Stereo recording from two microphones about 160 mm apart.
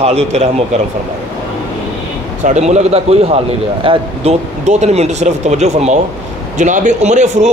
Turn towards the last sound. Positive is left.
turn(degrees=-45)  # may be behind; listen again after turning